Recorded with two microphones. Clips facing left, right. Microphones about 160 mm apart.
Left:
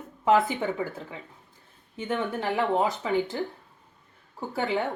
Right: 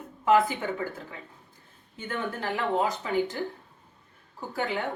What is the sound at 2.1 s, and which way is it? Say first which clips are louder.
A woman's voice: left 3 dB; 20° left (ahead or behind).